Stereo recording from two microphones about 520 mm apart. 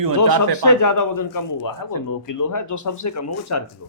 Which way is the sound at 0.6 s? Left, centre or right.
Left.